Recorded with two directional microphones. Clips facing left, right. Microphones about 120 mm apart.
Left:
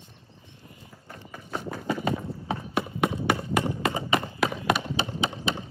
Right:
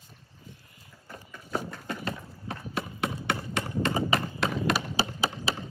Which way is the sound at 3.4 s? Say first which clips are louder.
Left 4 dB; 5° left (ahead or behind).